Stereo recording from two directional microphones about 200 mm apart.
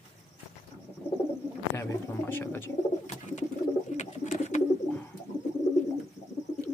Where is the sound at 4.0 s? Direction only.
35° left (ahead or behind).